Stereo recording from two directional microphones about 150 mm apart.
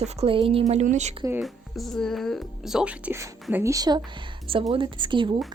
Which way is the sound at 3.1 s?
15° right (ahead or behind).